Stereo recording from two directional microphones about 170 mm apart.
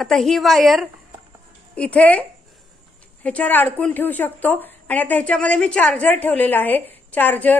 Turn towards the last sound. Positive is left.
turn(degrees=10)  # may be behind; listen again after turning